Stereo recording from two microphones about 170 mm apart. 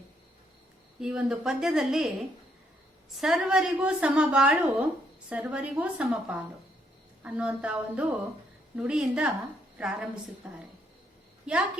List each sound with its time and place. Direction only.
0.9 s a woman's voice: 5° right (ahead or behind)
3.2 s a woman's voice: centre (ahead or behind)